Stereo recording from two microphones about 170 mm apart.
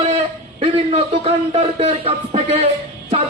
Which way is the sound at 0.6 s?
35° right (ahead or behind).